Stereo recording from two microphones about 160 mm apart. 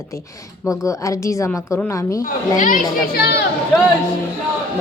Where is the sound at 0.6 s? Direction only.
20° left (ahead or behind).